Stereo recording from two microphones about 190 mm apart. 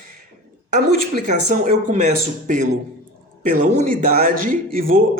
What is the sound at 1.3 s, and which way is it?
Speech, 40° right (ahead or behind).